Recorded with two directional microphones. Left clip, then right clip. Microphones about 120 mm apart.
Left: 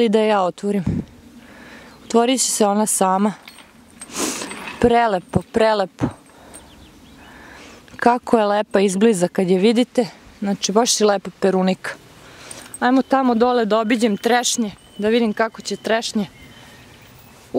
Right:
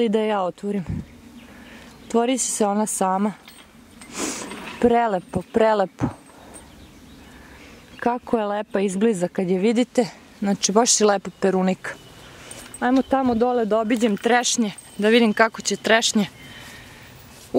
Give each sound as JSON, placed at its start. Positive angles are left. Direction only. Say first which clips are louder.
{"t": 0.0, "sound": "a woman's voice", "louder": "left 5 dB", "side_deg": 25}
{"t": 2.0, "sound": "a woman's voice", "louder": "left 4 dB", "side_deg": 20}
{"t": 4.1, "sound": "a sound", "louder": "left 4 dB", "side_deg": 15}
{"t": 4.5, "sound": "a sound", "louder": "left 3 dB", "side_deg": 50}
{"t": 4.7, "sound": "a woman's voice", "louder": "left 3 dB", "side_deg": 25}
{"t": 8.0, "sound": "a woman's voice", "louder": "left 7 dB", "side_deg": 30}
{"t": 13.1, "sound": "speech", "louder": "left 4 dB", "side_deg": 35}
{"t": 14.2, "sound": "a woman's voice", "louder": "left 1 dB", "side_deg": 15}
{"t": 14.7, "sound": "speech", "louder": "right 1 dB", "side_deg": 0}